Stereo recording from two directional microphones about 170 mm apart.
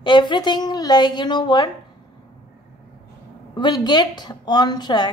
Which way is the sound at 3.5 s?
25° left (ahead or behind).